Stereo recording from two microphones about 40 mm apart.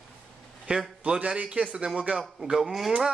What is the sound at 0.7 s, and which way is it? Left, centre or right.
A man's voice, right.